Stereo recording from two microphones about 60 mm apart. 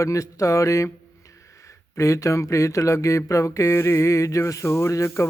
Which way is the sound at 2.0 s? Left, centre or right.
Left.